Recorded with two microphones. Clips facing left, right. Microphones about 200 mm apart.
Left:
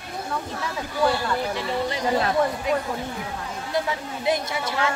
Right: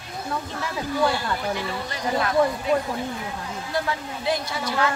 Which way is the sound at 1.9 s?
25° left (ahead or behind).